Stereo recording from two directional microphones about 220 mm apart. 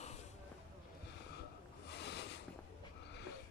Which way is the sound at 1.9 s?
50° left (ahead or behind).